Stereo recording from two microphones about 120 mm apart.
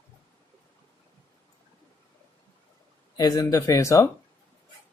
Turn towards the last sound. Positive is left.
turn(degrees=25)  # may be behind; listen again after turning